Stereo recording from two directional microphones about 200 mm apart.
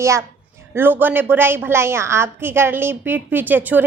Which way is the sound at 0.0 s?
15° right (ahead or behind).